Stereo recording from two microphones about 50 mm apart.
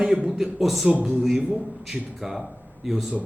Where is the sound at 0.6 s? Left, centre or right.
Centre.